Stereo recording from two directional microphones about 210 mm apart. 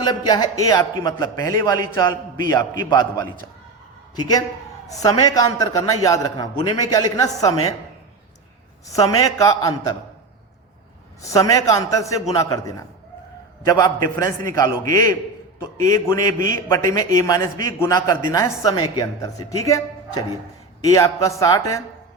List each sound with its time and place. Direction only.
0.0 s a man's voice: 20° left (ahead or behind)
8.9 s a man's voice: 15° left (ahead or behind)
11.2 s a man's voice: 15° left (ahead or behind)
20.8 s a man's voice: 15° left (ahead or behind)